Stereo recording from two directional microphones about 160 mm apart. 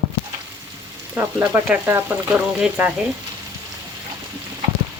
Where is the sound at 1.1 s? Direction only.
15° right (ahead or behind).